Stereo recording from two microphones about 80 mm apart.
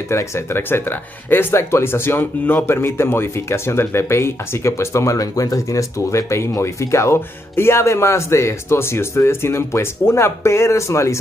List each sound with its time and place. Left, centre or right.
0.1 s speech: left